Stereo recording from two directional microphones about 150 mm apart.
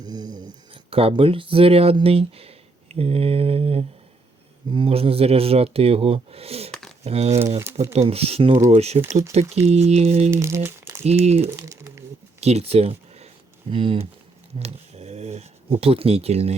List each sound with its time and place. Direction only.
0.0 s speech: 25° right (ahead or behind); by 7.4 s 45° right (ahead or behind)
7.4 s speech: 25° right (ahead or behind)
7.9 s speech: 40° right (ahead or behind)
10.3 s speech: 15° right (ahead or behind)
11.0 s speech: 45° right (ahead or behind)
11.5 s crumpling: 20° right (ahead or behind)
12.4 s speech: 45° right (ahead or behind)